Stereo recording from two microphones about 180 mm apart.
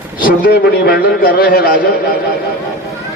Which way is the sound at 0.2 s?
55° left (ahead or behind).